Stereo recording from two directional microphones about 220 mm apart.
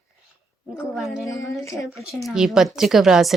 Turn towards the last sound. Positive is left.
turn(degrees=0)  # may be behind; listen again after turning